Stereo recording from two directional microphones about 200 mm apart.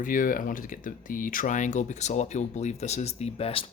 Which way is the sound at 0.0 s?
40° left (ahead or behind).